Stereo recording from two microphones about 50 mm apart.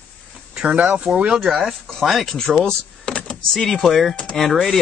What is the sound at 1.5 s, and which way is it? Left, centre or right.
Speech, centre.